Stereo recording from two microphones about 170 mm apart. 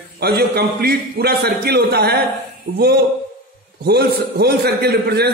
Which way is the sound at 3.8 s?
70° right (ahead or behind).